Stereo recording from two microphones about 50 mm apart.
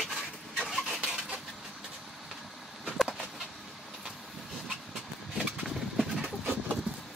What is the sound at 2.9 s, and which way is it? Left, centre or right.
Bird, centre.